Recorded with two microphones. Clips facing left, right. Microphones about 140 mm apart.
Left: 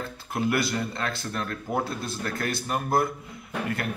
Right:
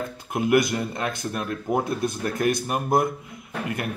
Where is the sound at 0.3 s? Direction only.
20° right (ahead or behind).